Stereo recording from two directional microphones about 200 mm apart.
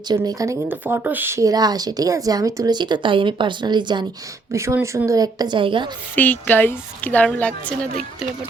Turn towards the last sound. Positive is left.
turn(degrees=5)  # may be behind; listen again after turning